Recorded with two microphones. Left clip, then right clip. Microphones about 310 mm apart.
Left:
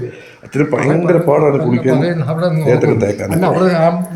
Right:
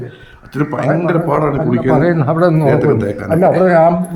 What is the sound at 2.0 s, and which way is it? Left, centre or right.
Speech, right.